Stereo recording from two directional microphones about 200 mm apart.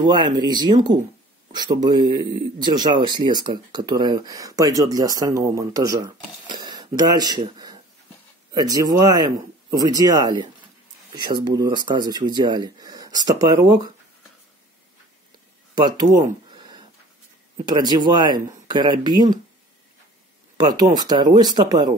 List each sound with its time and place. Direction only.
0.1 s speech: 20° right (ahead or behind)
15.7 s speech: 20° right (ahead or behind)
16.4 s a sound: 20° right (ahead or behind)
17.6 s speech: 20° right (ahead or behind)
20.5 s speech: 20° right (ahead or behind)